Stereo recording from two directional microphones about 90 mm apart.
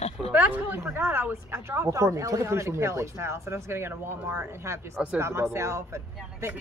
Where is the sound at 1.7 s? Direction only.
35° right (ahead or behind).